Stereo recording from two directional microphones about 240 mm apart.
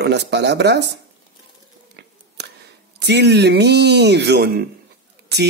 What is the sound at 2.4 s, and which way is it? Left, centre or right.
Scissors, right.